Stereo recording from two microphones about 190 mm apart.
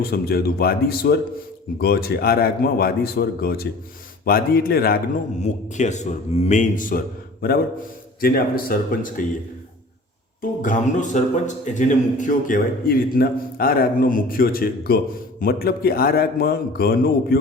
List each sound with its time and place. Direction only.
0.0 s a man's voice: 55° left (ahead or behind)
5.4 s a man's voice: 40° left (ahead or behind)
8.2 s a man's voice: 50° left (ahead or behind)
10.6 s a man's voice: 40° left (ahead or behind)